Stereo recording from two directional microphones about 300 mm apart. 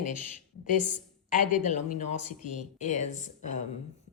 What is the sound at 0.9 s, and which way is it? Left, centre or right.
Speech, left.